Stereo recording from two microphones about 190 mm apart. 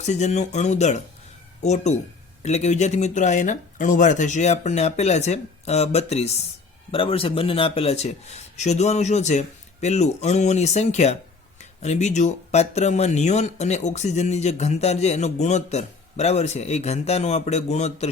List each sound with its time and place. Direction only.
0.1 s speech: 35° left (ahead or behind)